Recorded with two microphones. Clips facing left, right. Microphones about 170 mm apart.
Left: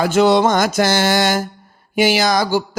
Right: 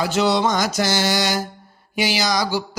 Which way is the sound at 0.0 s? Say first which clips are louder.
Left 6 dB; 50° left (ahead or behind).